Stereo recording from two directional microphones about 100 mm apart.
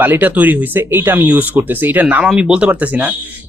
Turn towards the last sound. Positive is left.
turn(degrees=-15)  # may be behind; listen again after turning